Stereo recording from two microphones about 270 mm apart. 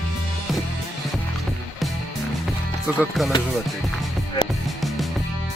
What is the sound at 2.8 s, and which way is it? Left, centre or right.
Speech, centre.